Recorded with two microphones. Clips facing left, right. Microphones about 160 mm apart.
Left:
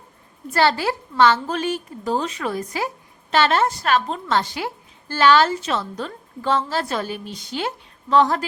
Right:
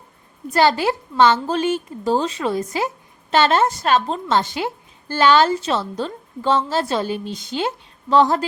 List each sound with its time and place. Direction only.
0.5 s a woman's voice: 15° right (ahead or behind)